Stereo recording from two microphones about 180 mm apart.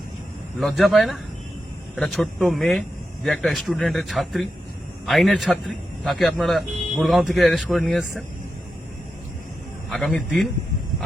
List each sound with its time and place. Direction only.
0.6 s a man's voice: centre (ahead or behind)
9.9 s a man's voice: 5° left (ahead or behind)